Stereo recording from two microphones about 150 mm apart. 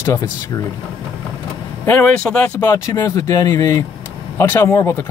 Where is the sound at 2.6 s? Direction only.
25° left (ahead or behind).